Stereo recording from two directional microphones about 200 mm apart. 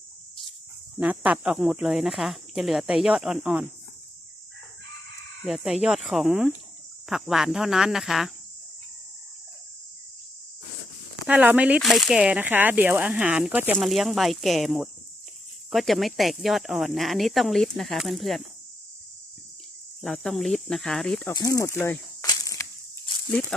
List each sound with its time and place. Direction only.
0.9 s speech: 10° right (ahead or behind)
5.4 s speech: centre (ahead or behind)
11.3 s speech: 5° right (ahead or behind)
20.0 s speech: centre (ahead or behind)
21.3 s a sound: 15° left (ahead or behind)
23.3 s speech: 10° left (ahead or behind)